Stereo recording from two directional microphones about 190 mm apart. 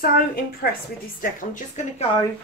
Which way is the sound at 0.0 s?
50° left (ahead or behind).